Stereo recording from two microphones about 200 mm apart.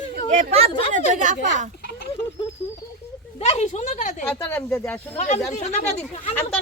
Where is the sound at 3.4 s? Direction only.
35° left (ahead or behind).